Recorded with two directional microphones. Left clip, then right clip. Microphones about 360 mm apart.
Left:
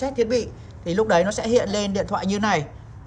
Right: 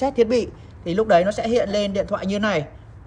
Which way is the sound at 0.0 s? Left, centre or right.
Centre.